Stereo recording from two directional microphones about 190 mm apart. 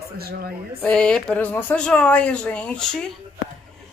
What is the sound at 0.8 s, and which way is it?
Speech, 5° left (ahead or behind).